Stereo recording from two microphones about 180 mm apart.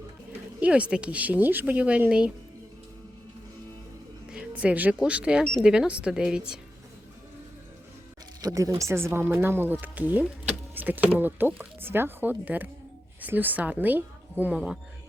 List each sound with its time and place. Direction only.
0.6 s speech: 5° right (ahead or behind)
4.3 s speech: 5° right (ahead or behind)
8.4 s speech: 20° right (ahead or behind)